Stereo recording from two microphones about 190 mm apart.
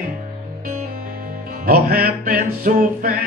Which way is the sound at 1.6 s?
50° right (ahead or behind).